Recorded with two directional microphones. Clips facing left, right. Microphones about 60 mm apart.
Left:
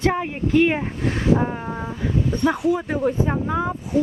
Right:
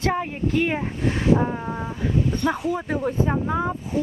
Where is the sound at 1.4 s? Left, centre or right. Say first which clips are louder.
Even; centre.